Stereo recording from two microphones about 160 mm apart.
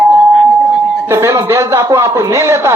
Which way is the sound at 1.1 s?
15° right (ahead or behind).